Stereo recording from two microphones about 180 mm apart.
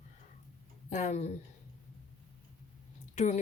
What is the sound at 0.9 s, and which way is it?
Speech, 40° left (ahead or behind).